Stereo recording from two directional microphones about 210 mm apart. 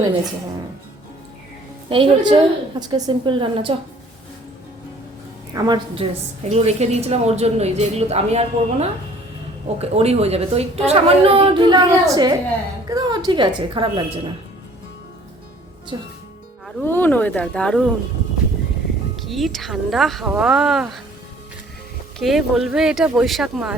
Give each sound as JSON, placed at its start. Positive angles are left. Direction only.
{"t": 1.9, "sound": "a woman's voice", "side_deg": -25}
{"t": 5.5, "sound": "a woman's voice", "side_deg": -20}
{"t": 15.9, "sound": "a woman's voice", "side_deg": -20}
{"t": 16.6, "sound": "speech", "side_deg": 10}
{"t": 19.3, "sound": "speech", "side_deg": 0}
{"t": 22.2, "sound": "speech", "side_deg": 0}